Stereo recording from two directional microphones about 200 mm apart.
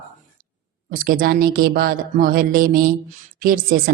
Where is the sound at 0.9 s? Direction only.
45° right (ahead or behind).